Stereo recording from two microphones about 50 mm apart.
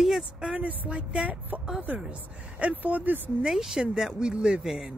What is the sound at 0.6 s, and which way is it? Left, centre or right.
Speech, right.